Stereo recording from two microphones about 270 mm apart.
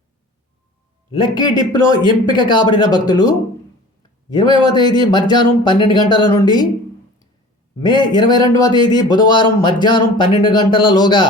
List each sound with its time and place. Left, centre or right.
1.1 s speech: centre
7.8 s speech: centre